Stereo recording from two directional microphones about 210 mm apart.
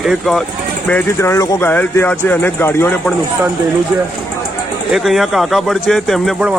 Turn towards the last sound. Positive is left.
turn(degrees=0)  # may be behind; listen again after turning